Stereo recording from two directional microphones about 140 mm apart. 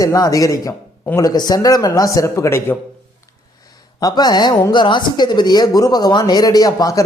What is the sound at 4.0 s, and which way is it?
A man's voice, 30° left (ahead or behind).